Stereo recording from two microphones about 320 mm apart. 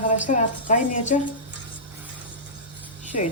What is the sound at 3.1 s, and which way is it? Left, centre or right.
Speech, left.